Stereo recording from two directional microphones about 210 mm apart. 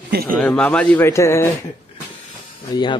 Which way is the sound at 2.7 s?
20° left (ahead or behind).